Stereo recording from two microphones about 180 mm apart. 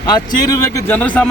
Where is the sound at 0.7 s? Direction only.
10° left (ahead or behind).